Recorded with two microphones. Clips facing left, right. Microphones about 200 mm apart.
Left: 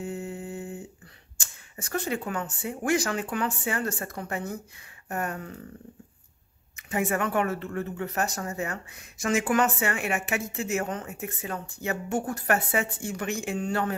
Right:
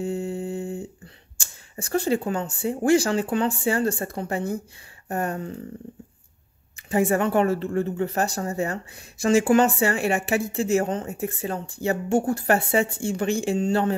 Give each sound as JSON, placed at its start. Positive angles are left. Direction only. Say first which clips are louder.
{"t": 0.0, "sound": "a sound", "louder": "right 7 dB", "side_deg": -30}
{"t": 1.4, "sound": "speech", "louder": "right 6 dB", "side_deg": -30}
{"t": 6.9, "sound": "speech", "louder": "right 6 dB", "side_deg": -30}